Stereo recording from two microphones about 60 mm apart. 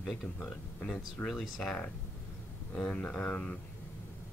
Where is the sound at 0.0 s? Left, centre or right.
Centre.